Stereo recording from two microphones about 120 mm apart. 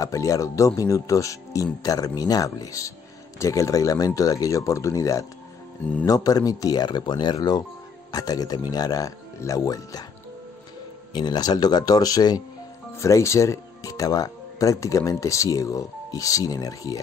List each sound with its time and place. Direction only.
0.0 s speech: 25° left (ahead or behind)
11.1 s speech: 35° left (ahead or behind)